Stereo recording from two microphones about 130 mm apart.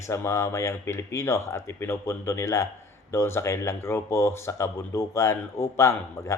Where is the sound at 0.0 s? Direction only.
20° left (ahead or behind).